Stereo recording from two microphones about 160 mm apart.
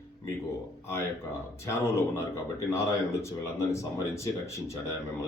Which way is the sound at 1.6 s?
20° left (ahead or behind).